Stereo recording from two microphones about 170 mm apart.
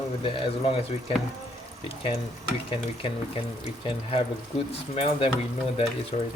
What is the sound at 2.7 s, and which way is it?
Speech, 30° left (ahead or behind).